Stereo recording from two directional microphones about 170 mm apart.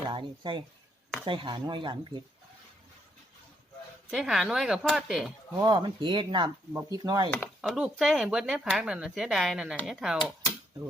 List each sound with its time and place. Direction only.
0.0 s speech: 30° right (ahead or behind)
4.1 s speech: centre (ahead or behind)
5.5 s speech: 25° right (ahead or behind)
7.7 s speech: centre (ahead or behind)